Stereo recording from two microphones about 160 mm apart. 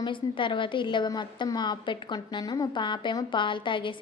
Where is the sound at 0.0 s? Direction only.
30° left (ahead or behind).